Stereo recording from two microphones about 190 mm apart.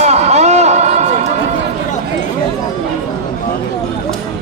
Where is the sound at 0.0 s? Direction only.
35° right (ahead or behind).